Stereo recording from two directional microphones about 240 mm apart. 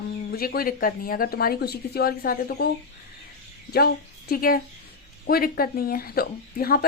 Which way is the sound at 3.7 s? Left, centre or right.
Left.